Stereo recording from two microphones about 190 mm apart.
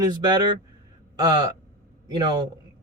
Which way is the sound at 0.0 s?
20° right (ahead or behind).